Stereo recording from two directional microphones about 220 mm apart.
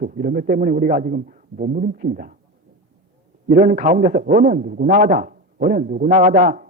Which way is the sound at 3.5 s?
35° right (ahead or behind).